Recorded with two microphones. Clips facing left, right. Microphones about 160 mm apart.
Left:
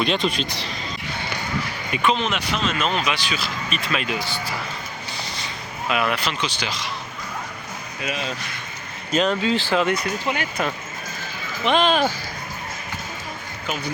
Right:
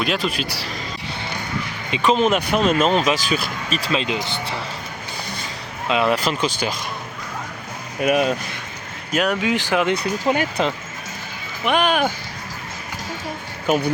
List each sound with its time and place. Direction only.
0.0 s speech: 5° right (ahead or behind)
2.0 s speech: 40° right (ahead or behind)
3.8 s speech: 30° right (ahead or behind)
5.9 s speech: 25° right (ahead or behind)
6.1 s speech: 45° right (ahead or behind)
8.0 s speech: 55° right (ahead or behind)
9.1 s speech: 10° right (ahead or behind)
10.0 s speech: 35° right (ahead or behind)
11.6 s speech: 10° right (ahead or behind)
13.7 s speech: 55° right (ahead or behind)